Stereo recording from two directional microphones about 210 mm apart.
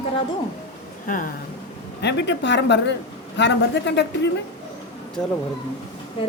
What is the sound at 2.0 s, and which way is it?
A woman's voice, 55° left (ahead or behind).